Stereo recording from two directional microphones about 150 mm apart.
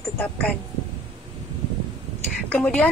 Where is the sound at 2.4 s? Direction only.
10° left (ahead or behind).